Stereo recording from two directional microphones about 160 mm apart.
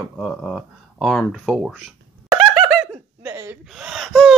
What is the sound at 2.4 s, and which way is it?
Laughter, centre (ahead or behind).